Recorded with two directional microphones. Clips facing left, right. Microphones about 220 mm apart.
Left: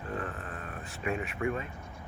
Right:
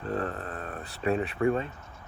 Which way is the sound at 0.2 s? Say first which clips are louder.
Right 5 dB; 35° right (ahead or behind).